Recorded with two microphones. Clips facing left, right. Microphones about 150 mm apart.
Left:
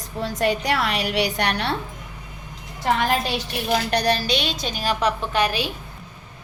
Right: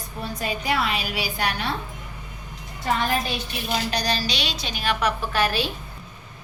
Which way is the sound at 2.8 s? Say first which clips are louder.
Left 3 dB; 80° left.